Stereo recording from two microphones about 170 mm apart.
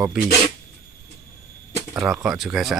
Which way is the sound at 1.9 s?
5° right (ahead or behind).